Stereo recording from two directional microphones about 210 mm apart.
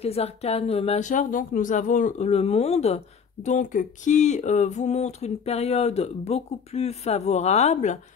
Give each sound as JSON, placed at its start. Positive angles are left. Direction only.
{"t": 0.0, "sound": "speech", "side_deg": 30}